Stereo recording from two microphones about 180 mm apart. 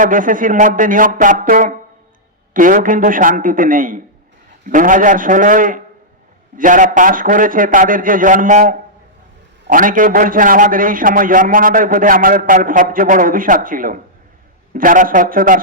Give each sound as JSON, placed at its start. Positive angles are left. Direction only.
{"t": 0.0, "sound": "a man's voice", "side_deg": -50}